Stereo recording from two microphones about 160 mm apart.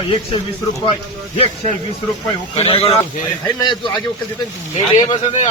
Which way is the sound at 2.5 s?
35° left (ahead or behind).